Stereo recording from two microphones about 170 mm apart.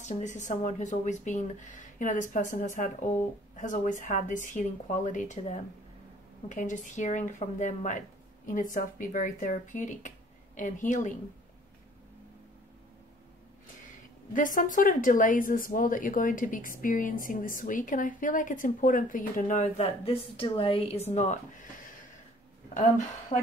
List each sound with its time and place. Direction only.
0.1 s a woman's voice: 45° left (ahead or behind)
14.3 s a woman's voice: 50° left (ahead or behind)
23.3 s speech: 30° left (ahead or behind)